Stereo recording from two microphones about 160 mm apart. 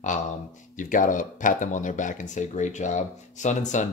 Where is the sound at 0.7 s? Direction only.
55° left (ahead or behind).